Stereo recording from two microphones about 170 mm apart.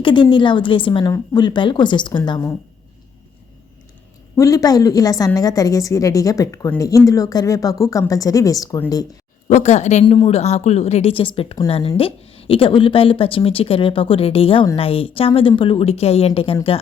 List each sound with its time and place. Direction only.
0.0 s a woman's voice: 30° left (ahead or behind)
4.4 s a woman's voice: 20° left (ahead or behind)
9.5 s a woman's voice: 45° left (ahead or behind)